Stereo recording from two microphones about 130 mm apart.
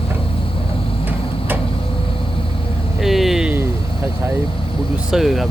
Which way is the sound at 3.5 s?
20° right (ahead or behind).